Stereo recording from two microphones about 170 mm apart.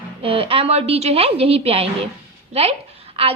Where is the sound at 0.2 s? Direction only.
35° right (ahead or behind).